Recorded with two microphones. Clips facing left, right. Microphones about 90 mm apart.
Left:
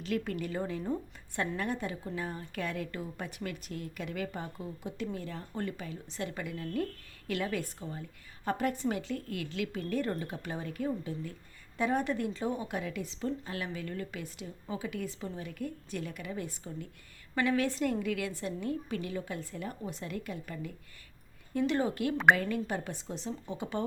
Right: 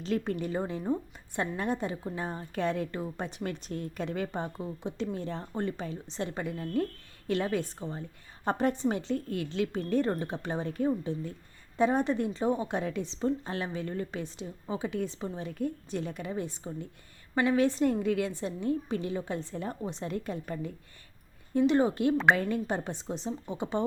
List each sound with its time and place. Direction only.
0.0 s a woman's voice: 30° right (ahead or behind)